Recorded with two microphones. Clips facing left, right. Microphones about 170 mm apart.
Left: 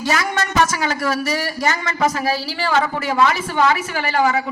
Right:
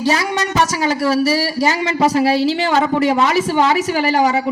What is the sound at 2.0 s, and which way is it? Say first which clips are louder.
Speech: right 6 dB; 35° right (ahead or behind).